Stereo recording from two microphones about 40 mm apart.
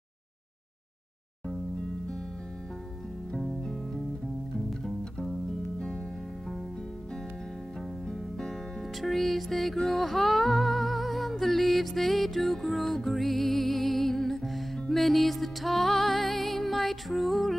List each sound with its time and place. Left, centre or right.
3.3 s music: centre
8.1 s music: centre
9.0 s music: centre